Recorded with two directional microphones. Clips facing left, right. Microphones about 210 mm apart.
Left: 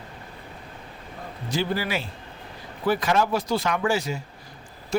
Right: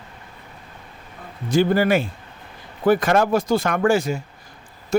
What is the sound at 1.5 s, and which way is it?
Speech, 50° right (ahead or behind).